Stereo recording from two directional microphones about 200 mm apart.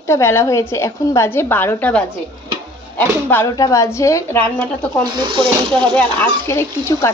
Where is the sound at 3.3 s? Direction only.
15° left (ahead or behind).